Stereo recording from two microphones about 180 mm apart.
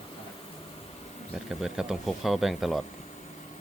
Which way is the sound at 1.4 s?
5° right (ahead or behind).